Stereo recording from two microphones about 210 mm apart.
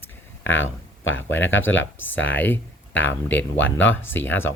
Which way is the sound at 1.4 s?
65° left (ahead or behind).